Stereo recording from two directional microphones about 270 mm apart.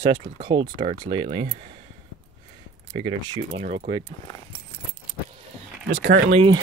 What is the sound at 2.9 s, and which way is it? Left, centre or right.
Speech, centre.